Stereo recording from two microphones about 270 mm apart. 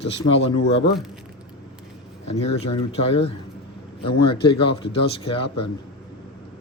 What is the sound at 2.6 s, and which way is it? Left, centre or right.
Speech, left.